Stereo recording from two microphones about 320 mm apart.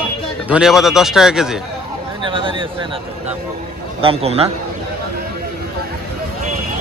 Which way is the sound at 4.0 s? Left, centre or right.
Centre.